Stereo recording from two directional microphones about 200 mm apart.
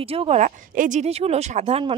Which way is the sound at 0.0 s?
30° right (ahead or behind).